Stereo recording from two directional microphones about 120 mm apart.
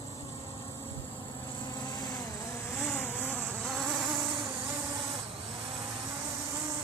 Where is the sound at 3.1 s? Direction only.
15° left (ahead or behind).